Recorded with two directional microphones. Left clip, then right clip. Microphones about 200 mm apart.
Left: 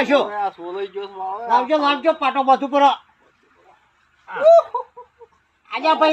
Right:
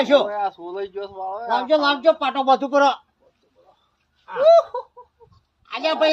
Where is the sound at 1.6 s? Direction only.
25° right (ahead or behind).